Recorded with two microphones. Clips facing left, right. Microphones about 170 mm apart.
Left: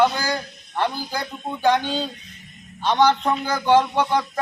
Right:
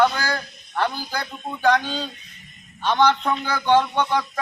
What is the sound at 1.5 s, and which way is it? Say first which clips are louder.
Speech: even; centre (ahead or behind).